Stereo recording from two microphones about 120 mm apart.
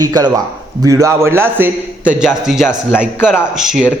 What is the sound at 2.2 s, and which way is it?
A man's voice, 5° right (ahead or behind).